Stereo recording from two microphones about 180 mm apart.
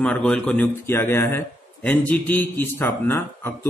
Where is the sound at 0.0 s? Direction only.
5° left (ahead or behind).